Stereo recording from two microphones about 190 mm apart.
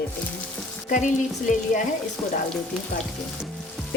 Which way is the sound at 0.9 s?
40° left (ahead or behind).